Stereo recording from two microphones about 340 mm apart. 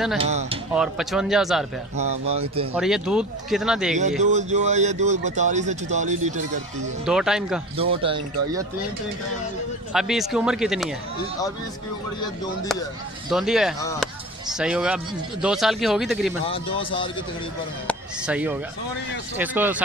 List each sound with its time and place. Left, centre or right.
0.2 s speech: centre
0.7 s speech: centre
2.0 s speech: centre
2.7 s speech: centre
4.2 s speech: centre
7.1 s speech: centre
7.7 s speech: centre
9.9 s speech: centre
13.3 s speech: centre
13.7 s a man's voice: centre
14.5 s speech: centre
16.4 s a man's voice: centre
17.8 s speech: centre